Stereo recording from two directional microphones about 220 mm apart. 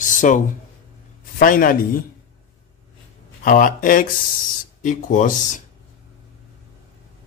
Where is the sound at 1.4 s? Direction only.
40° left (ahead or behind).